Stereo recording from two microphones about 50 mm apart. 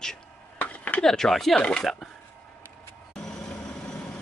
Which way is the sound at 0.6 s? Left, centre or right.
Left.